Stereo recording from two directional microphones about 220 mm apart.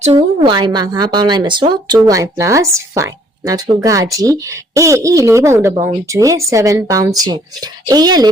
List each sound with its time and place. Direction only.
0.0 s speech: 25° right (ahead or behind)